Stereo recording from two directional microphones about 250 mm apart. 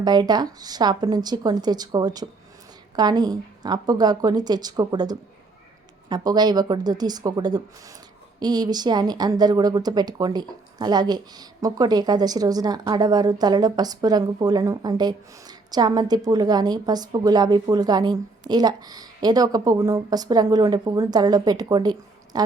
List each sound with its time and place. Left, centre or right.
0.0 s a woman's voice: centre